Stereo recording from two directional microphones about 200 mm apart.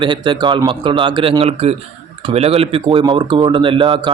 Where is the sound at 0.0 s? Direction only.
25° right (ahead or behind).